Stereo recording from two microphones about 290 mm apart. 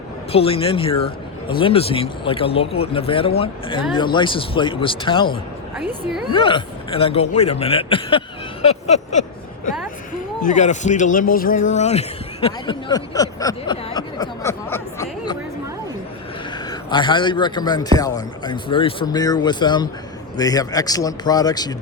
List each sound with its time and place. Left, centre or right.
0.3 s a man's voice: centre
5.7 s a woman's voice: centre
6.3 s speech: centre
10.4 s a man's voice: left
16.6 s a man's voice: centre